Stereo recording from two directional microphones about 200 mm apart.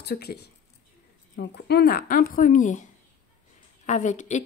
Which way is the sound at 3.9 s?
40° left (ahead or behind).